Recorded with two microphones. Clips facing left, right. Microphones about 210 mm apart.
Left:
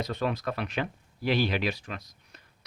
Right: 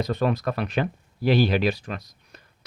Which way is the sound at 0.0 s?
40° right (ahead or behind).